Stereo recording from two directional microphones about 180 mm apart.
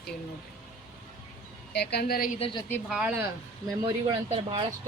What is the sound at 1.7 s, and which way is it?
Speech, 65° left (ahead or behind).